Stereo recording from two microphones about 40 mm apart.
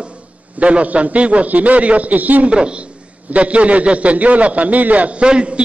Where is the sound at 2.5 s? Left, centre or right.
Right.